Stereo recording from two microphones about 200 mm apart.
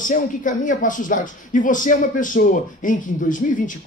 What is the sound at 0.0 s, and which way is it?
Speech, 40° left (ahead or behind).